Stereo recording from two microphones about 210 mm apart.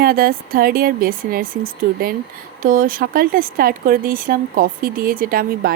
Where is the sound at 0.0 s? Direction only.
45° right (ahead or behind).